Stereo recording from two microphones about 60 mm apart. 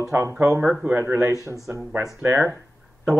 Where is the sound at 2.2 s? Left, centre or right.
Right.